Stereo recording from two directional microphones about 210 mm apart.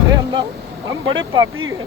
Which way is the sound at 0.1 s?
20° right (ahead or behind).